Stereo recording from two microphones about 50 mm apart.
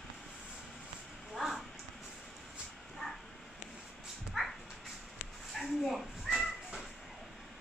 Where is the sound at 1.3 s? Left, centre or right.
Centre.